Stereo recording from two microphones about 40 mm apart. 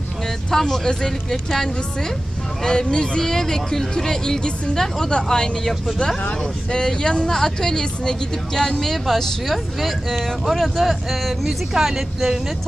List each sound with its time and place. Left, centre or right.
0.5 s speech: centre